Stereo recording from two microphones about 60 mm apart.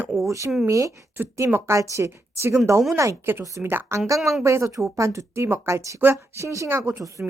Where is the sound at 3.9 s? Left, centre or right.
Right.